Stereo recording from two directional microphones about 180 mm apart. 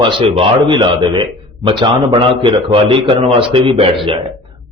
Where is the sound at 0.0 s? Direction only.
30° right (ahead or behind).